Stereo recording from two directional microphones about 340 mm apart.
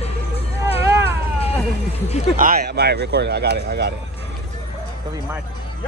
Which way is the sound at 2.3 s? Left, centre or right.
Right.